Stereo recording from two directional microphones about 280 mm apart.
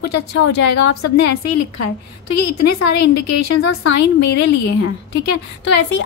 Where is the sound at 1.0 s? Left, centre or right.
Left.